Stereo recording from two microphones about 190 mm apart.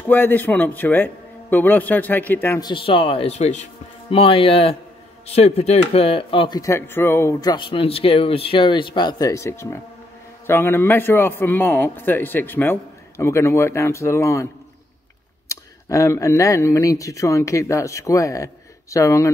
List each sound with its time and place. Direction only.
0.1 s speech: 10° left (ahead or behind)
2.6 s speech: 25° left (ahead or behind)
6.6 s speech: 15° left (ahead or behind)